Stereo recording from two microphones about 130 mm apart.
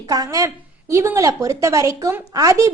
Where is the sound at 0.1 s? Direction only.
25° right (ahead or behind).